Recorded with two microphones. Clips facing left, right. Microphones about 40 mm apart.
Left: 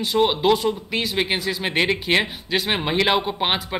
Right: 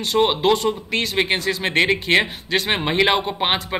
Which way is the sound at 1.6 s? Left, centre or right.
Centre.